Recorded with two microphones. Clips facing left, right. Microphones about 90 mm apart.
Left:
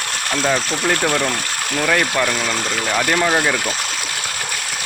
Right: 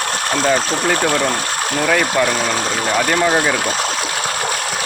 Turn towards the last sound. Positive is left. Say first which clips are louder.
# right 2 dB
turn(degrees=-5)  # may be behind; listen again after turning